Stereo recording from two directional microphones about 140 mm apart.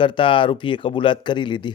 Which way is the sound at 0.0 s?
35° left (ahead or behind).